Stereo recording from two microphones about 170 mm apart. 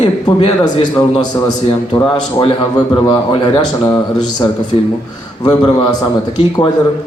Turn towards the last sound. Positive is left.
turn(degrees=25)  # may be behind; listen again after turning